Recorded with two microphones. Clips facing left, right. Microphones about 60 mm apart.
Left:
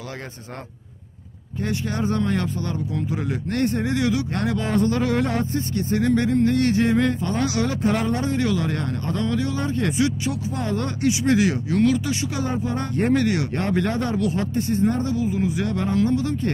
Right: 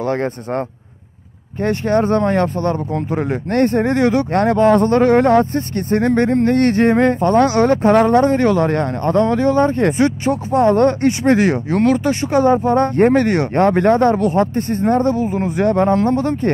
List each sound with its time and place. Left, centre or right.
0.0 s speech: right
1.6 s speech: right